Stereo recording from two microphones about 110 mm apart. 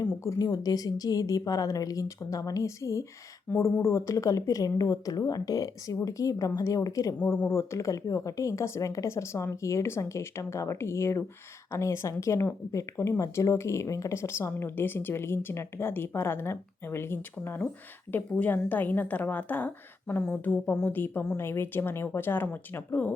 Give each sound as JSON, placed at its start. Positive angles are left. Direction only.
{"t": 0.3, "sound": "a woman's voice", "side_deg": 40}